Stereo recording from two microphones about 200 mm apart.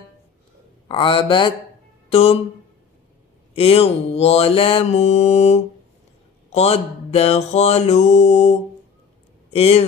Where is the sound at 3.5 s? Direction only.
30° left (ahead or behind).